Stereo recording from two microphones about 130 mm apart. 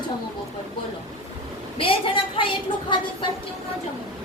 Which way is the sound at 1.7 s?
45° left (ahead or behind).